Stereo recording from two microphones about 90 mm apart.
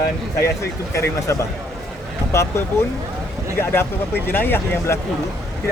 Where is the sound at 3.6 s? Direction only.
25° left (ahead or behind).